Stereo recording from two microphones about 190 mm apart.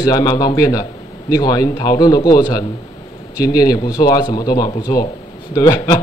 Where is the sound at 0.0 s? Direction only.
20° left (ahead or behind).